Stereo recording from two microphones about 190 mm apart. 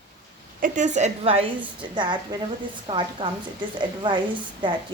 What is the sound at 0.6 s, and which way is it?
A woman's voice, 40° right (ahead or behind).